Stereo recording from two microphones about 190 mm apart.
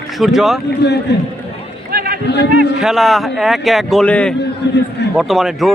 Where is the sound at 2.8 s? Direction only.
Centre (ahead or behind).